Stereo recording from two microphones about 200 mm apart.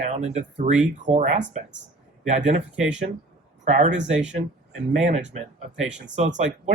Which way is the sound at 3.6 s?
35° right (ahead or behind).